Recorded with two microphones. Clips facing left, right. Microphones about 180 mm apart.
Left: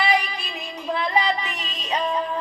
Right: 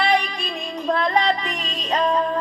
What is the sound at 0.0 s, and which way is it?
Music, 5° left (ahead or behind).